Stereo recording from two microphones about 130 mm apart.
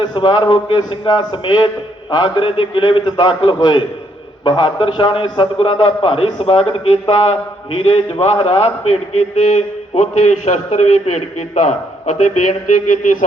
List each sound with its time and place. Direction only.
0.0 s a man's voice: 35° left (ahead or behind); by 13.2 s 85° left